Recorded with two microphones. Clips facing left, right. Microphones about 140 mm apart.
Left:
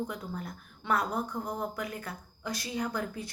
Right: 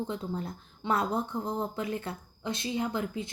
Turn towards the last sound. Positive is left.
turn(degrees=-20)  # may be behind; listen again after turning